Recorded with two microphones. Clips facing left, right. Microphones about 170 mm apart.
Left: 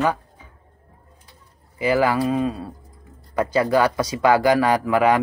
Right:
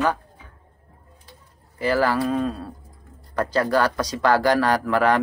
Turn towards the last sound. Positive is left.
turn(degrees=5)  # may be behind; listen again after turning